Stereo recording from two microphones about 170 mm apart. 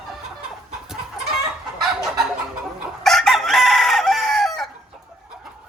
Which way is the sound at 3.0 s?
Centre (ahead or behind).